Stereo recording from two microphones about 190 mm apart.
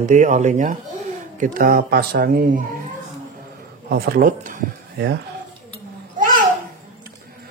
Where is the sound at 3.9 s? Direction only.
50° right (ahead or behind).